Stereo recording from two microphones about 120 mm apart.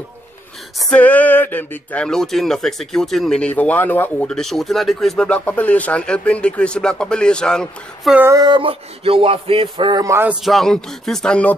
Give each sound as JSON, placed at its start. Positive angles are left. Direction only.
{"t": 0.7, "sound": "speech", "side_deg": 10}
{"t": 4.3, "sound": "speech", "side_deg": 5}
{"t": 8.3, "sound": "a sound", "side_deg": -35}
{"t": 9.9, "sound": "music", "side_deg": -25}
{"t": 10.4, "sound": "speech", "side_deg": 0}